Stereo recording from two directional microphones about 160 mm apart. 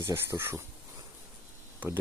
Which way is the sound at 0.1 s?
20° right (ahead or behind).